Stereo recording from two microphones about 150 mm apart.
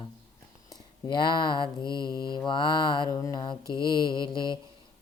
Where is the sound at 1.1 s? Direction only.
30° left (ahead or behind).